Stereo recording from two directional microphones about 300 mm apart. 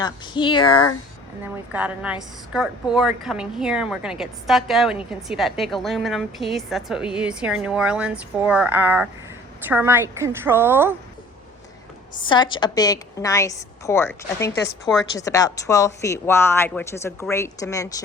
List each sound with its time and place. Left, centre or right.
0.0 s a woman's voice: centre
1.7 s a woman's voice: centre
12.2 s a woman's voice: centre
14.5 s speech: left
15.2 s a woman's voice: centre